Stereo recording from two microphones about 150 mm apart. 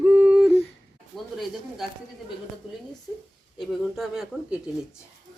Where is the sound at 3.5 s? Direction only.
Centre (ahead or behind).